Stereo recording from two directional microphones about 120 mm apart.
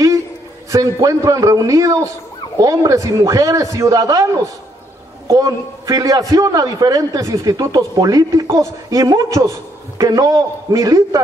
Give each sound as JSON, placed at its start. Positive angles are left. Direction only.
{"t": 0.7, "sound": "a man's voice", "side_deg": -25}
{"t": 5.3, "sound": "a man's voice", "side_deg": -30}